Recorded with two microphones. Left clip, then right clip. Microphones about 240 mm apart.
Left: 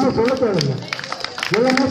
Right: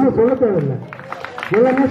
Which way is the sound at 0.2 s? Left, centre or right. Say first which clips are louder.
Right 4 dB; right.